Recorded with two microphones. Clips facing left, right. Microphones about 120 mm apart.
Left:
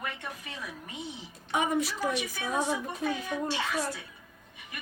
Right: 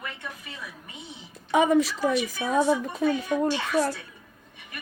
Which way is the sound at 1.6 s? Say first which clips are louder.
Right 8 dB; 90° right.